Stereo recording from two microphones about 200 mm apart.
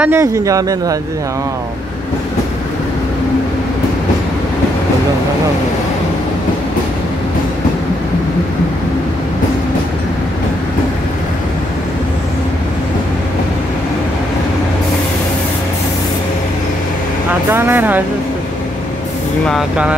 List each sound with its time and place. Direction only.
0.0 s speech: 15° right (ahead or behind)
17.5 s speech: 10° right (ahead or behind)
19.4 s speech: centre (ahead or behind)